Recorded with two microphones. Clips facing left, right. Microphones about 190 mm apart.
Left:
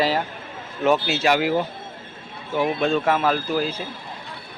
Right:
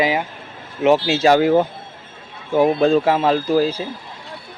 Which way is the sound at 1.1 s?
35° right (ahead or behind).